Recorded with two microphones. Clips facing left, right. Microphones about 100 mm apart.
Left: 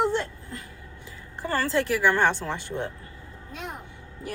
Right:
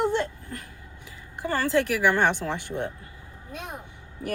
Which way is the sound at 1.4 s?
15° right (ahead or behind).